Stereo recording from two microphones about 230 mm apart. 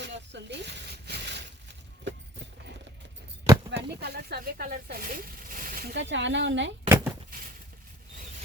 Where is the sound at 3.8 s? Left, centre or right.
Right.